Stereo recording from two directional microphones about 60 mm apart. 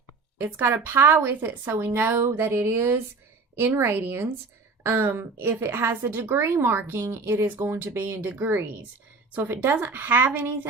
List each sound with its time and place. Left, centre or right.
0.3 s a woman's voice: right